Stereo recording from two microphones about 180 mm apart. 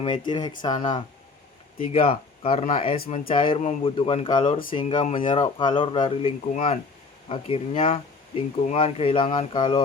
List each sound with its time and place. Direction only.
0.3 s speech: 25° left (ahead or behind)